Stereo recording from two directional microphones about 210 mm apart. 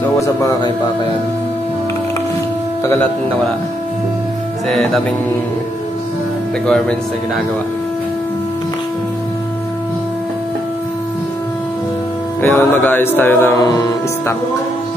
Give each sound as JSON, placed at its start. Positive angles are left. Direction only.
{"t": 0.2, "sound": "speech", "side_deg": 15}
{"t": 4.6, "sound": "music", "side_deg": 0}
{"t": 6.6, "sound": "music", "side_deg": 5}
{"t": 12.4, "sound": "speech", "side_deg": 10}